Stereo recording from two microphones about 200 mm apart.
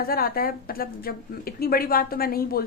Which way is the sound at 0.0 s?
50° left (ahead or behind).